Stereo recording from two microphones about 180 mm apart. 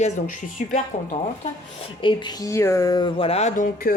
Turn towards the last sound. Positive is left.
turn(degrees=35)  # may be behind; listen again after turning